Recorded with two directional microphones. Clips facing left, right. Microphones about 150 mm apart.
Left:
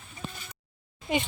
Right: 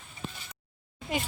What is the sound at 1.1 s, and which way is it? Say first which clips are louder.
Speech: left 4 dB; centre (ahead or behind).